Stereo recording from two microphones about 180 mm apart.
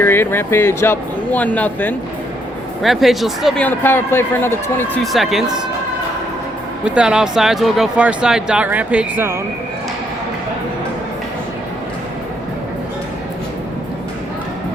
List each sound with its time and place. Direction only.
0.0 s speech: 10° left (ahead or behind)
5.1 s speech: centre (ahead or behind)
6.8 s speech: 5° right (ahead or behind)